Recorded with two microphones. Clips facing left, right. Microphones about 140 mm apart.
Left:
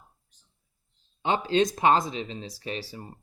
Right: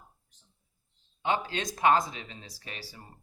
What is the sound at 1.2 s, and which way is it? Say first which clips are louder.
Speech: left 7 dB; 25° left (ahead or behind).